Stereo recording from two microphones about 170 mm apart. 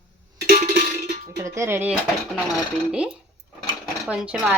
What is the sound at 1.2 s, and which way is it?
A woman's voice, 15° right (ahead or behind).